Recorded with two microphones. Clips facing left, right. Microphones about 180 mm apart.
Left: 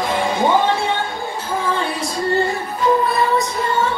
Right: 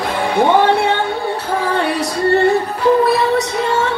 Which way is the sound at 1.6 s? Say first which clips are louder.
Right 3 dB; 65° right (ahead or behind).